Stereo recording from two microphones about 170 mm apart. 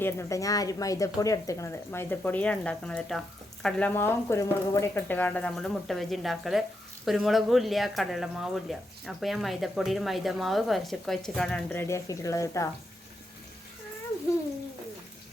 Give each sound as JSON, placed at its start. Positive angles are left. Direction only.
{"t": 0.0, "sound": "speech", "side_deg": 15}